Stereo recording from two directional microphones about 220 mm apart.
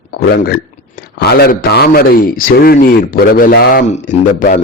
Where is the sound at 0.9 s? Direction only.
40° left (ahead or behind).